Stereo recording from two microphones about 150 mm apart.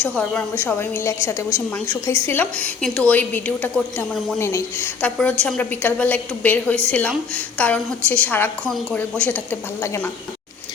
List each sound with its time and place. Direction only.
0.0 s a woman's voice: 10° left (ahead or behind)
4.4 s a woman's voice: 15° left (ahead or behind)